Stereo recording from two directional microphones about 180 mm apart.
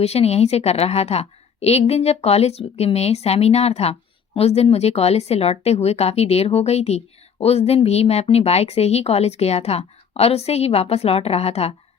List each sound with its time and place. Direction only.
0.0 s speech: 35° left (ahead or behind)